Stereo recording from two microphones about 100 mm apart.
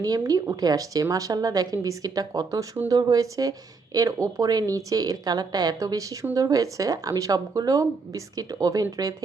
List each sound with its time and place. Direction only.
0.2 s speech: 35° right (ahead or behind)